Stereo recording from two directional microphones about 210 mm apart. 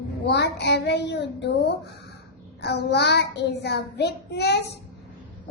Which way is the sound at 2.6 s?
55° left (ahead or behind).